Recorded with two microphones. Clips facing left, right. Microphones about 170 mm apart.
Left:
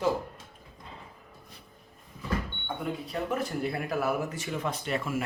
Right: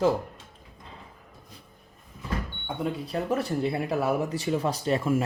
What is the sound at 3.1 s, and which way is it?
A man's voice, 35° right (ahead or behind).